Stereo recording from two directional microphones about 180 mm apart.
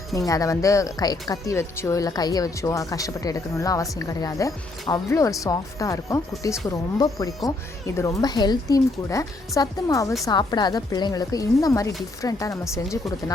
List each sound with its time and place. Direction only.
0.2 s speech: 20° left (ahead or behind)